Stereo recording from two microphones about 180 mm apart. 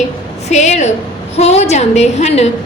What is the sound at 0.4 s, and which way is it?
A woman's voice, 40° left (ahead or behind).